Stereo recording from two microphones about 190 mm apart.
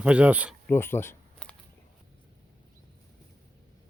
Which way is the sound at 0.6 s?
10° left (ahead or behind).